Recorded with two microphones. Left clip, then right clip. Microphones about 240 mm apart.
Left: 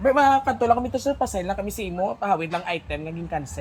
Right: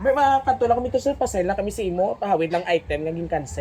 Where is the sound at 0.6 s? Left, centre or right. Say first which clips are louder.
Even; left.